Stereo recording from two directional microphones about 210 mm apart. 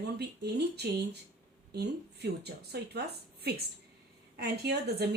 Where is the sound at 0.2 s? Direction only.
50° right (ahead or behind).